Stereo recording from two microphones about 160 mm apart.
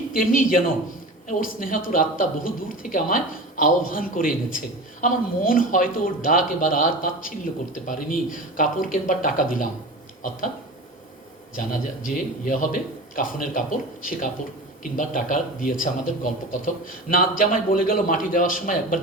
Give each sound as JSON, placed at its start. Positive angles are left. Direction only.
{"t": 0.1, "sound": "speech", "side_deg": 60}
{"t": 12.0, "sound": "speech", "side_deg": 55}